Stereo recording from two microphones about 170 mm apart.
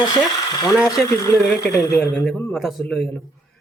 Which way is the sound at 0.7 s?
5° right (ahead or behind).